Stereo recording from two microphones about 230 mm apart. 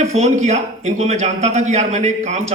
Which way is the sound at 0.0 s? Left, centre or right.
Right.